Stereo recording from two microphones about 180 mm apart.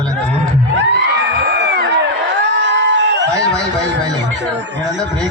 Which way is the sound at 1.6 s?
65° right (ahead or behind).